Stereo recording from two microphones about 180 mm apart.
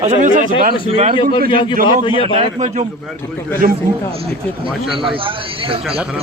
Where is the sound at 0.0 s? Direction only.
40° right (ahead or behind).